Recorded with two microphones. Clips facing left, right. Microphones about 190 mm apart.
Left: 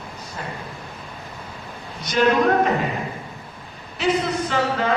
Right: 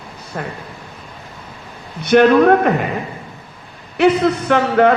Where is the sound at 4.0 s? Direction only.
60° right (ahead or behind).